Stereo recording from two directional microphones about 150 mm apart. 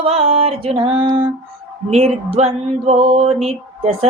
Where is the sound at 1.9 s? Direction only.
45° right (ahead or behind).